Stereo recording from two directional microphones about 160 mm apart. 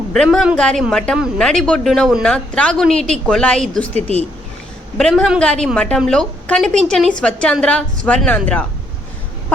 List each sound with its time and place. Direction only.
0.1 s speech: 5° left (ahead or behind)
3.9 s speech: 40° right (ahead or behind)
4.9 s a woman's voice: centre (ahead or behind)